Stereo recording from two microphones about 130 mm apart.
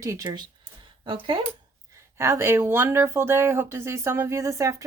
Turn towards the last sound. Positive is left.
turn(degrees=-25)  # may be behind; listen again after turning